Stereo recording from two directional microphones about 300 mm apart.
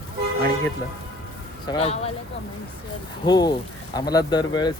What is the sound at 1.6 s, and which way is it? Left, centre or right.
Speech, centre.